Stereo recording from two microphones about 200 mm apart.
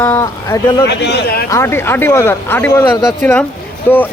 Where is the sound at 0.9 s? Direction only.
60° left (ahead or behind).